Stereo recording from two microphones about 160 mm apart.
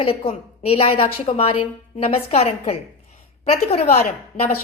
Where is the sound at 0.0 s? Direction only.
35° left (ahead or behind).